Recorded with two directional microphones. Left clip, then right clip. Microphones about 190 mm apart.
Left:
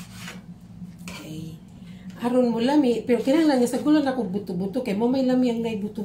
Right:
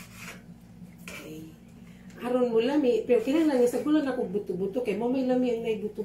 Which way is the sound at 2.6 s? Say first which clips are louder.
Left 3 dB; 40° left (ahead or behind).